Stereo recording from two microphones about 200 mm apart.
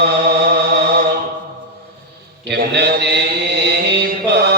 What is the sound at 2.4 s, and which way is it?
Mantra, 55° right (ahead or behind).